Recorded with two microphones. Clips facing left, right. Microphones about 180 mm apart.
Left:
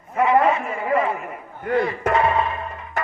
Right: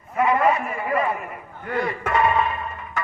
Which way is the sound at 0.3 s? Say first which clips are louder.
Left 2 dB; 25° left (ahead or behind).